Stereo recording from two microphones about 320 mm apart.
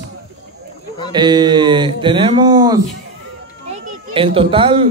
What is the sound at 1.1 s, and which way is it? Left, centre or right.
A child's voice, centre.